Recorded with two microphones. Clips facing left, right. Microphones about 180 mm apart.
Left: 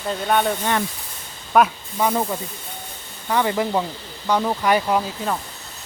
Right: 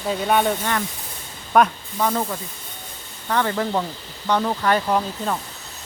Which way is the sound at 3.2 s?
10° left (ahead or behind).